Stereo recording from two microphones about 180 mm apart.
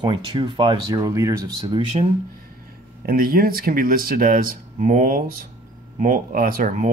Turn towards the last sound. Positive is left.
turn(degrees=-45)  # may be behind; listen again after turning